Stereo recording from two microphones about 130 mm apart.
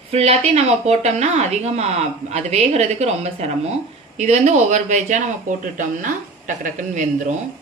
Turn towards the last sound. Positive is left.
turn(degrees=-75)  # may be behind; listen again after turning